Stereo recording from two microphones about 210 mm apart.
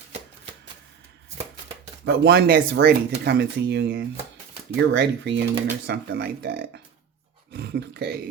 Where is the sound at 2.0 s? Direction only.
50° right (ahead or behind).